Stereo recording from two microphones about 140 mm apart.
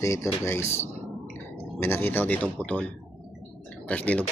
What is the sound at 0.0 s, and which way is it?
Speech, 20° left (ahead or behind).